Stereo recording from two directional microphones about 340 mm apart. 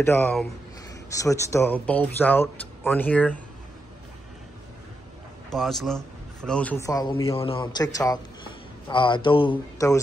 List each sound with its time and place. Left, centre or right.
0.0 s a man's voice: centre
5.5 s a man's voice: centre